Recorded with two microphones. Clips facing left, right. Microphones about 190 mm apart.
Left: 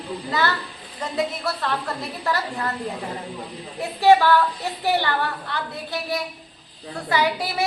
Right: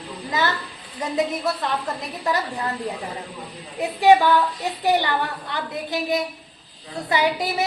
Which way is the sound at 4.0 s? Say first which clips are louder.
Even; 15° right (ahead or behind).